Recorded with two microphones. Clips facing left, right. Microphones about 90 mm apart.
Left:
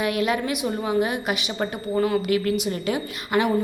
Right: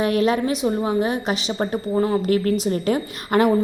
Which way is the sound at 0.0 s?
35° right (ahead or behind).